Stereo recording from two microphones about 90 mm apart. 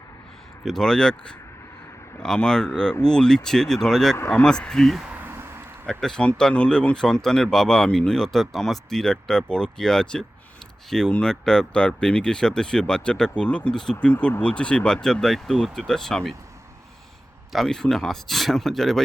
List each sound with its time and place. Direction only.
0.6 s speech: 5° left (ahead or behind)
5.0 s a sound: 20° right (ahead or behind)
5.8 s speech: 5° left (ahead or behind)
17.5 s speech: 5° left (ahead or behind)